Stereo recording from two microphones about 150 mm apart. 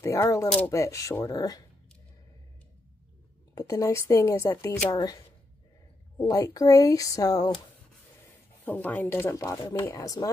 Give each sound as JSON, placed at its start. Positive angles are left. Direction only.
{"t": 0.0, "sound": "speech", "side_deg": 20}
{"t": 3.5, "sound": "speech", "side_deg": 25}
{"t": 8.6, "sound": "speech", "side_deg": 10}